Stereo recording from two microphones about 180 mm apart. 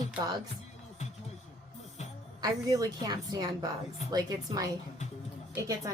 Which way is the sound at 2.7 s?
20° right (ahead or behind).